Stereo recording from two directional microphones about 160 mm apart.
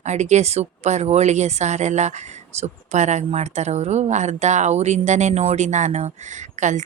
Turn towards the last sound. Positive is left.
turn(degrees=-50)  # may be behind; listen again after turning